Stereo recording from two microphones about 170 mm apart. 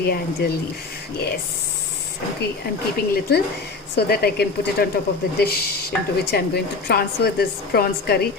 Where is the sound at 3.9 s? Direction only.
65° left (ahead or behind).